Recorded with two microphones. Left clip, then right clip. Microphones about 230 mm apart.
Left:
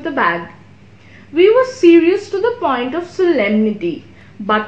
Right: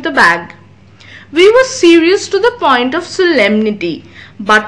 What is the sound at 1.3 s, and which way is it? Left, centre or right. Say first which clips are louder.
A woman's voice: right 4 dB; right.